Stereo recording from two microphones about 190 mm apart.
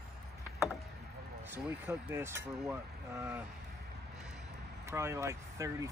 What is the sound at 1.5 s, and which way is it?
Speech, 15° right (ahead or behind).